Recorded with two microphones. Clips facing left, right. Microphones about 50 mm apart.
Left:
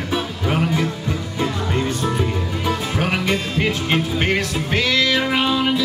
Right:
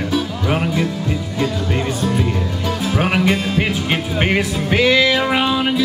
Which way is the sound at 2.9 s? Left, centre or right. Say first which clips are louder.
Right 7 dB; centre.